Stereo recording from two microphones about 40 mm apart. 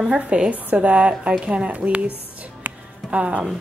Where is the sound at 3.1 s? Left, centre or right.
Right.